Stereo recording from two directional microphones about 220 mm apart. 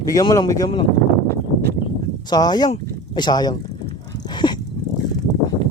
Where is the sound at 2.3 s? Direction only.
20° left (ahead or behind).